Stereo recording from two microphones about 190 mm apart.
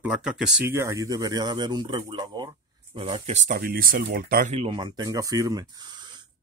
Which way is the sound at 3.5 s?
50° right (ahead or behind).